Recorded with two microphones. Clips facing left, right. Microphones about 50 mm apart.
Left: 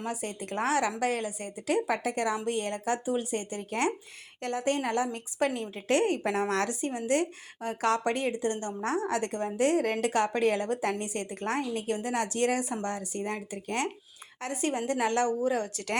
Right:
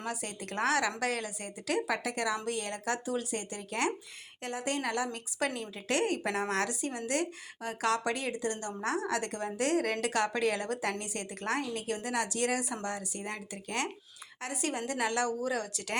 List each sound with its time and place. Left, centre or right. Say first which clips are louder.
0.0 s a woman's voice: left 3 dB; left